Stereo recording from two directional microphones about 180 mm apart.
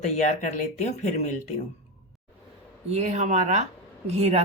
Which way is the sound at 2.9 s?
40° right (ahead or behind).